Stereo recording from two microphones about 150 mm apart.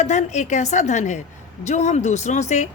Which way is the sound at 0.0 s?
50° left (ahead or behind).